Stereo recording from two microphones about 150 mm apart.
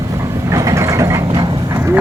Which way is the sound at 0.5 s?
20° right (ahead or behind).